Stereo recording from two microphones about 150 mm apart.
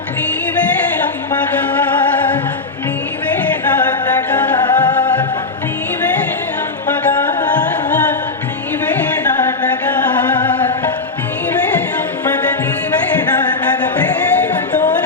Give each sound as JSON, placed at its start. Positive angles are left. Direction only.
{"t": 4.5, "sound": "music", "side_deg": 30}